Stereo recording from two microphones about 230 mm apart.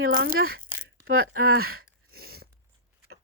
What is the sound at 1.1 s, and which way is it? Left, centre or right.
Speech, right.